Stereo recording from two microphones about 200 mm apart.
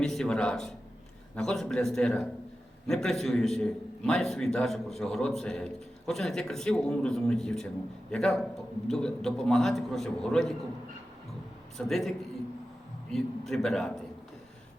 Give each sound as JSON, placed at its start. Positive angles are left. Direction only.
{"t": 0.0, "sound": "a man's voice", "side_deg": 0}
{"t": 11.8, "sound": "a man's voice", "side_deg": 0}